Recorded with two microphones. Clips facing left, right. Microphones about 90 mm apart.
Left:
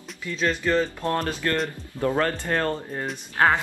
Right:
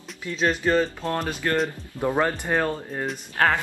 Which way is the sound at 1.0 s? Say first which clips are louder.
Left 1 dB; 5° right (ahead or behind).